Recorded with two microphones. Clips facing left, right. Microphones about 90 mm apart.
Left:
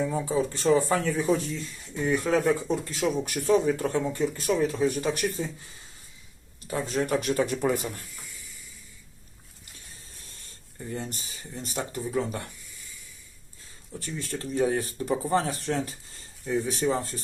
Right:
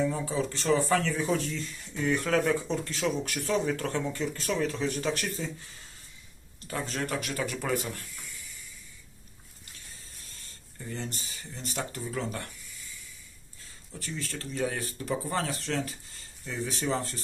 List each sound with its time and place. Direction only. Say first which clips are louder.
0.0 s speech: left 3 dB; 15° left (ahead or behind)
6.7 s speech: left 6 dB; 15° left (ahead or behind)
7.2 s speech: left 7 dB; 30° left (ahead or behind)
10.8 s speech: left 3 dB; 15° left (ahead or behind)
14.0 s speech: left 3 dB; 20° left (ahead or behind)